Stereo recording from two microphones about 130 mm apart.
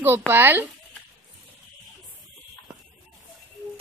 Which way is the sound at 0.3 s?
15° right (ahead or behind).